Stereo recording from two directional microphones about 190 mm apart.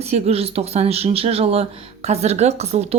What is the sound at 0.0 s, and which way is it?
Speech, 30° right (ahead or behind).